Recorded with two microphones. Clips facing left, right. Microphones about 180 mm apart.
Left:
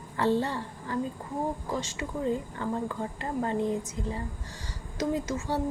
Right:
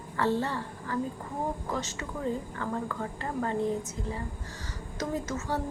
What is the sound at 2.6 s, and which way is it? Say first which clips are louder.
Speech: left 2 dB; 20° left (ahead or behind).